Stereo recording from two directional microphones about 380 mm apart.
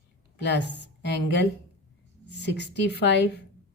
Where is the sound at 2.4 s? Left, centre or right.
Left.